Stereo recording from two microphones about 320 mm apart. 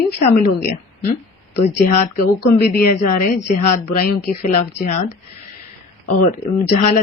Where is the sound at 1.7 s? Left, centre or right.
Left.